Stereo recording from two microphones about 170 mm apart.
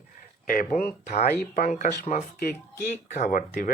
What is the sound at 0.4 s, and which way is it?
Speech, 55° left (ahead or behind).